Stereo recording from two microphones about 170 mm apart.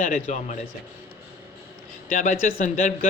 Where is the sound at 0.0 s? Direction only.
45° left (ahead or behind).